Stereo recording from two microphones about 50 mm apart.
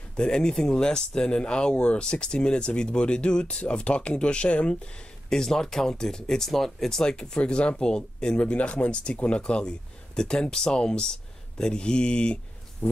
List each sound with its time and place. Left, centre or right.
0.1 s speech: centre
5.3 s speech: centre